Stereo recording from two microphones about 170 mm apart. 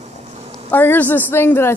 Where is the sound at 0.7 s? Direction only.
10° left (ahead or behind).